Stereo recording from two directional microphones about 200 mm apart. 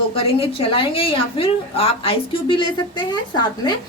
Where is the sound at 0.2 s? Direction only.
30° left (ahead or behind).